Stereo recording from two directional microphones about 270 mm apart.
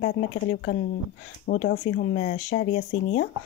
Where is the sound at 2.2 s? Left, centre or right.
Left.